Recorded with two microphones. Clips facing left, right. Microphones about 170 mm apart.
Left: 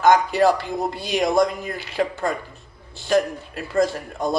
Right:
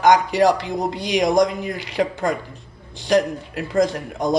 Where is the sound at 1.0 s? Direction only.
15° right (ahead or behind).